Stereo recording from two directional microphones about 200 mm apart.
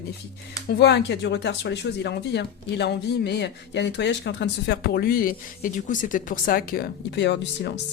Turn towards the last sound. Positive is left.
turn(degrees=60)  # may be behind; listen again after turning